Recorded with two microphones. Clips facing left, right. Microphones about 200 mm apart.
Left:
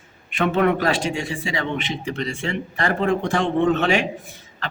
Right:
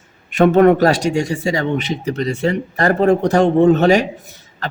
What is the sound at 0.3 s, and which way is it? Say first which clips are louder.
A man's voice: right 9 dB; 45° right (ahead or behind).